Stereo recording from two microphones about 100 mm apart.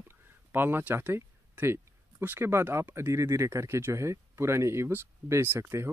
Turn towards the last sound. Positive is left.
turn(degrees=-25)  # may be behind; listen again after turning